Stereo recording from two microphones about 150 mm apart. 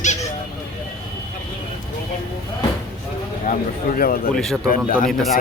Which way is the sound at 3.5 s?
65° left (ahead or behind).